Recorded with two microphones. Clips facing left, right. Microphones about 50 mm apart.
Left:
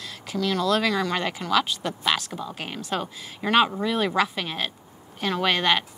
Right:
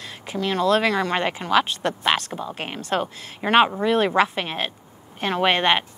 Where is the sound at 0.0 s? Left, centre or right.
Right.